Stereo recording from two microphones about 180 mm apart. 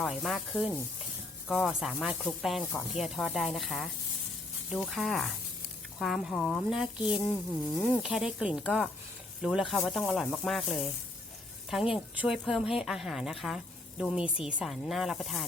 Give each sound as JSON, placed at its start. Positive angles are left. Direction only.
{"t": 0.0, "sound": "speech", "side_deg": 0}